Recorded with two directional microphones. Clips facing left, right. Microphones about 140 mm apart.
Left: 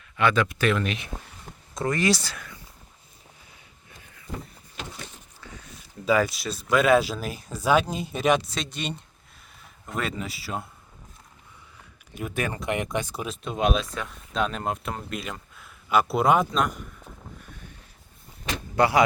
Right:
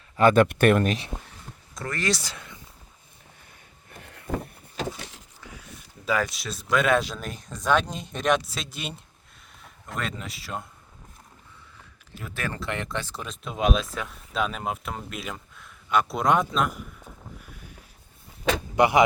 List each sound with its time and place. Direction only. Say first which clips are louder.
0.2 s speech: right 5 dB; 45° right (ahead or behind)
1.7 s speech: left 6 dB; 20° left (ahead or behind)
2.2 s speech: left 1 dB; 25° right (ahead or behind)
3.8 s vehicle: right 6 dB; 60° right (ahead or behind)
5.4 s a sound: left 1 dB; 10° right (ahead or behind)
6.1 s speech: left 4 dB; centre (ahead or behind)
12.1 s speech: left 4 dB; 20° left (ahead or behind); by 17.7 s 5° right (ahead or behind)
18.8 s speech: right 1 dB; 20° right (ahead or behind)